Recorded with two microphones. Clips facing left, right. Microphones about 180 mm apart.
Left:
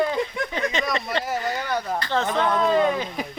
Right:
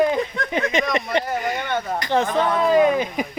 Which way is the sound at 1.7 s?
Centre (ahead or behind).